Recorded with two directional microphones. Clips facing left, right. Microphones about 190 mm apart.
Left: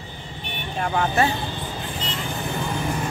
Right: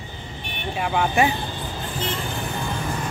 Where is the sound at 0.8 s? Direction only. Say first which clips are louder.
Right 1 dB; 10° right (ahead or behind).